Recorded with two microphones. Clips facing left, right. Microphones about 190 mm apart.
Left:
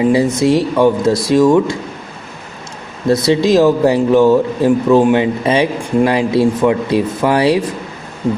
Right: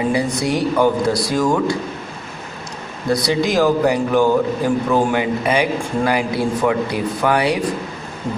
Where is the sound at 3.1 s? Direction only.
25° left (ahead or behind).